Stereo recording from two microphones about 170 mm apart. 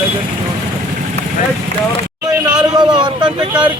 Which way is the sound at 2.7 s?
25° right (ahead or behind).